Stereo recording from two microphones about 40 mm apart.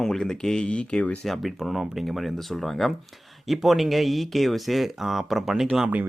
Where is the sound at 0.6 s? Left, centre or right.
Left.